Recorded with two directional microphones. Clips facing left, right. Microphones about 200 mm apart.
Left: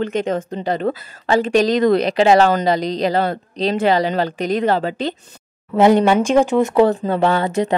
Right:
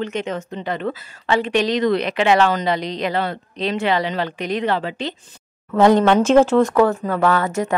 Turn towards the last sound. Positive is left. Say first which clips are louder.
# left 2 dB
turn(degrees=35)  # may be behind; listen again after turning